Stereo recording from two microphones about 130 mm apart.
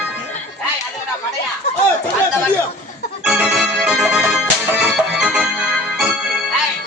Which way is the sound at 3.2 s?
5° right (ahead or behind).